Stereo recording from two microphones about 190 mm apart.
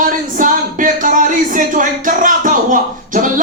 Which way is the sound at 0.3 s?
45° right (ahead or behind).